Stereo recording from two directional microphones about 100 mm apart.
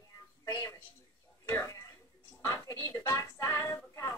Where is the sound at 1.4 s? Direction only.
30° left (ahead or behind).